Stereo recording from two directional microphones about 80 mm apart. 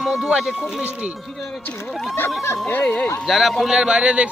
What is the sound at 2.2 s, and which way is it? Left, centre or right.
Speech, left.